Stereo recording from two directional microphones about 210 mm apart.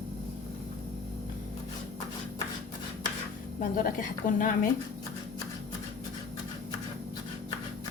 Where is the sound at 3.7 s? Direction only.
40° left (ahead or behind).